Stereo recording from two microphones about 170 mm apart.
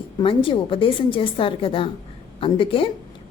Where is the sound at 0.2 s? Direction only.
30° left (ahead or behind).